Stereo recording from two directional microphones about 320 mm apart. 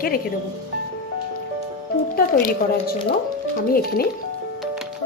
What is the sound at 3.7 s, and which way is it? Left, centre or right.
Speech, left.